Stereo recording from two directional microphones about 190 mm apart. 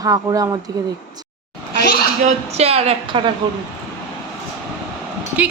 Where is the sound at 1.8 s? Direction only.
55° left (ahead or behind).